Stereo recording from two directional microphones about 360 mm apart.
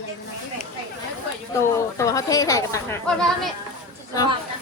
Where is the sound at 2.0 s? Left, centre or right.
Centre.